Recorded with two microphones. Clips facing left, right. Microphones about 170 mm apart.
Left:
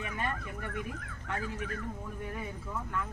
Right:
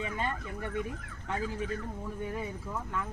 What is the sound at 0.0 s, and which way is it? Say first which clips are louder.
Horse: right 2 dB; 20° right (ahead or behind).